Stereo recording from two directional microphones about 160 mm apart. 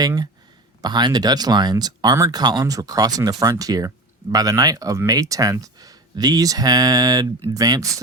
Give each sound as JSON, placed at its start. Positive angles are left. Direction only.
{"t": 0.0, "sound": "speech", "side_deg": -25}